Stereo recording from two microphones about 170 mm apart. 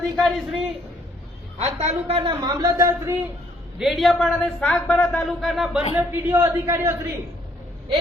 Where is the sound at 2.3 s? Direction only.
20° right (ahead or behind).